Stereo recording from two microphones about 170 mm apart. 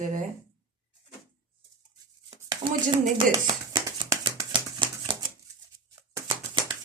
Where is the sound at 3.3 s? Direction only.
25° right (ahead or behind).